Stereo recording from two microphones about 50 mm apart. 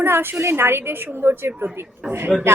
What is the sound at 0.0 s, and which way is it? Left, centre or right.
A woman's voice, right.